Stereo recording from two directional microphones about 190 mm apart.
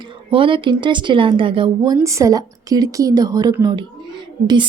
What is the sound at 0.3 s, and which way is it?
A woman's voice, 25° right (ahead or behind).